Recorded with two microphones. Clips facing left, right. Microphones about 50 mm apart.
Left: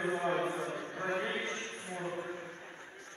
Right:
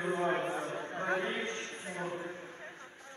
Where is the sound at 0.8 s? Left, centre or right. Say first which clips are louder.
Right 1 dB; right.